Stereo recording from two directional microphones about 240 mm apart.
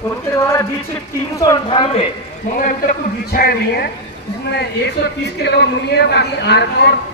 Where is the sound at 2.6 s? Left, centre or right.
Left.